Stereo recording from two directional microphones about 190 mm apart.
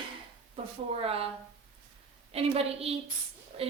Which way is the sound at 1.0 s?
30° right (ahead or behind).